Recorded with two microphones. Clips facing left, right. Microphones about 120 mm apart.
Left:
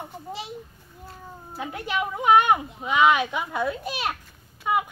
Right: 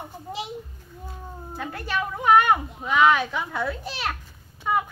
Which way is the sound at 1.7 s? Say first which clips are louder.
Left 1 dB; 15° left (ahead or behind).